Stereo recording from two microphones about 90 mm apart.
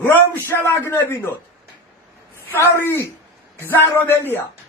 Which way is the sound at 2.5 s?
30° left (ahead or behind).